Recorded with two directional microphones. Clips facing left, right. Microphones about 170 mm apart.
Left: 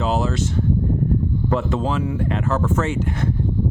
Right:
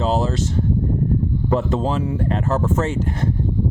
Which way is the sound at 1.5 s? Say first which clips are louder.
Right 2 dB; 35° right (ahead or behind).